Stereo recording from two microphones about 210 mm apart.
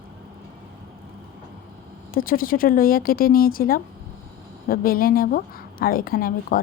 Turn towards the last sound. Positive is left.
turn(degrees=45)  # may be behind; listen again after turning